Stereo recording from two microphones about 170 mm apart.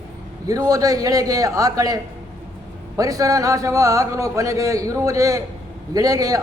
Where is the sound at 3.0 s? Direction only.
20° right (ahead or behind).